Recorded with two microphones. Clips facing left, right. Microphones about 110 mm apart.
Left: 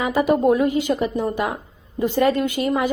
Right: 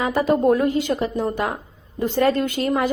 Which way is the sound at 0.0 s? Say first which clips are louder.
Even; 15° left (ahead or behind).